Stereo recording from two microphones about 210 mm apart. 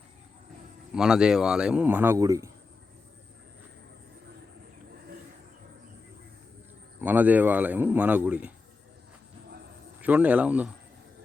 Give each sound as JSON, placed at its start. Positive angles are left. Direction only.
{"t": 0.9, "sound": "a man's voice", "side_deg": -5}
{"t": 7.0, "sound": "a man's voice", "side_deg": -10}
{"t": 10.0, "sound": "a man's voice", "side_deg": -5}